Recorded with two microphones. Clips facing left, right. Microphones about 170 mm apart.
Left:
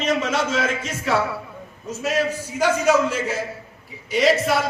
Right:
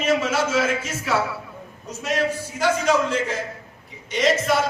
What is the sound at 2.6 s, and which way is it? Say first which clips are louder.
A man's voice: left 2 dB; 10° left (ahead or behind).